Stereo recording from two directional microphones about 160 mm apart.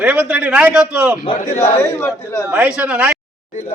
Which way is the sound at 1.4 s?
50° left (ahead or behind).